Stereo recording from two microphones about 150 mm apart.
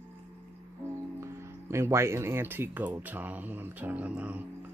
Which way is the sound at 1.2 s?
20° right (ahead or behind).